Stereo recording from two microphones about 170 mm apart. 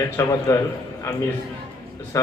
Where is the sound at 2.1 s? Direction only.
20° left (ahead or behind).